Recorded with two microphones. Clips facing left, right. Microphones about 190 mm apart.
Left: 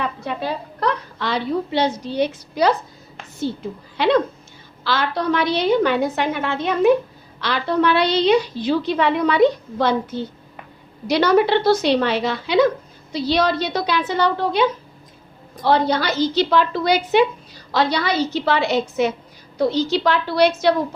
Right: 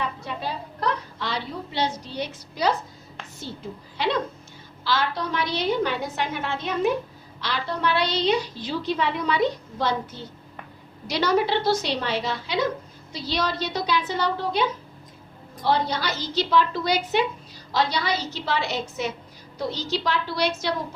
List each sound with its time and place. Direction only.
0.0 s a woman's voice: 65° left (ahead or behind)
3.9 s a woman's voice: 65° left (ahead or behind)